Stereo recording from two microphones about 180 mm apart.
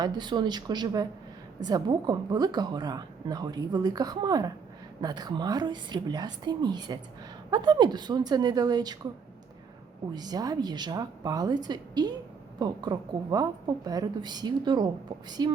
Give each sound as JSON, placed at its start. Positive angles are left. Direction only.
{"t": 0.0, "sound": "a woman's voice", "side_deg": -25}
{"t": 10.1, "sound": "a woman's voice", "side_deg": -20}